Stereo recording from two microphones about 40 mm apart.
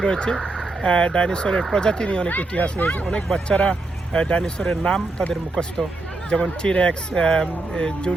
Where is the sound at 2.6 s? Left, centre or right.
Left.